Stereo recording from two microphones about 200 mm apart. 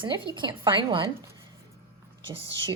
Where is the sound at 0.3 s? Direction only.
25° right (ahead or behind).